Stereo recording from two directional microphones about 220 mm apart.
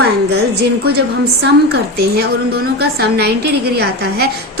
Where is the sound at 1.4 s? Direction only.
45° right (ahead or behind).